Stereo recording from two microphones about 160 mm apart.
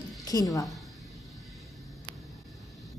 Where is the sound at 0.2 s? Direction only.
25° left (ahead or behind).